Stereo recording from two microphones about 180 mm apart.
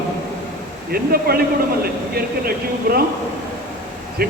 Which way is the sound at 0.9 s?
60° right (ahead or behind).